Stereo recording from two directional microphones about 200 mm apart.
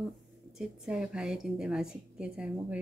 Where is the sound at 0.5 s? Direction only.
5° right (ahead or behind).